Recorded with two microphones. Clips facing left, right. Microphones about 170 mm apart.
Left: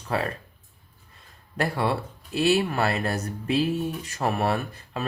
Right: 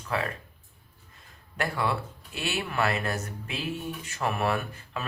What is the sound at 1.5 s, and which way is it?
Speech, 35° left (ahead or behind).